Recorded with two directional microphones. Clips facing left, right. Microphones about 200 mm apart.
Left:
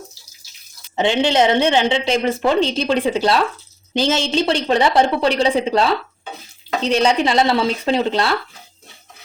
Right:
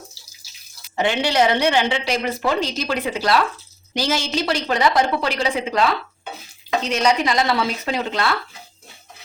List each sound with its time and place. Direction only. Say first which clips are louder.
0.9 s a woman's voice: left 3 dB; 20° left (ahead or behind)